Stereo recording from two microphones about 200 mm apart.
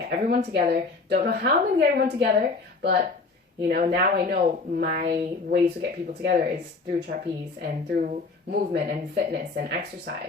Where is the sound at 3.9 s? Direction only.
50° right (ahead or behind).